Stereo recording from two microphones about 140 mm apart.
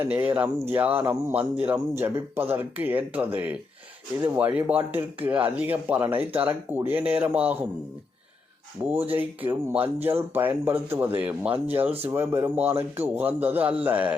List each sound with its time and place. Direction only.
0.0 s speech: 15° right (ahead or behind)
8.8 s speech: 15° right (ahead or behind)